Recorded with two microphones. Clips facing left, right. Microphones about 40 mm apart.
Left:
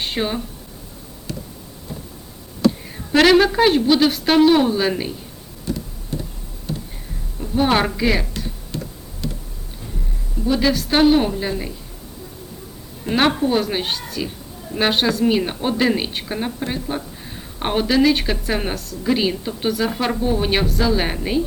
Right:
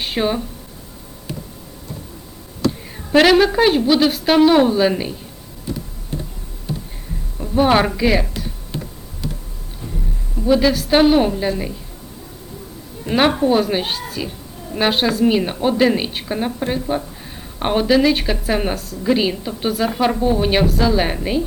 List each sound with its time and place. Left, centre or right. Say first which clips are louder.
0.0 s speech: right 3 dB; centre
2.6 s a woman's voice: left 3 dB; centre
7.3 s a sound: right 3 dB; centre
10.4 s speech: right 3 dB; centre
13.1 s a woman's voice: right 2 dB; centre